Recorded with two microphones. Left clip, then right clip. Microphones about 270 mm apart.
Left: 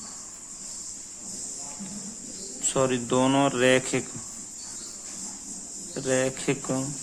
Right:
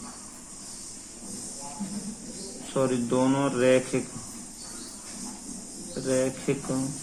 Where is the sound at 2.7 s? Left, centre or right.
Left.